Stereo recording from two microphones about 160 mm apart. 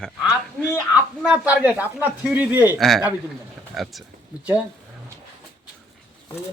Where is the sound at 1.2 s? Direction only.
10° right (ahead or behind).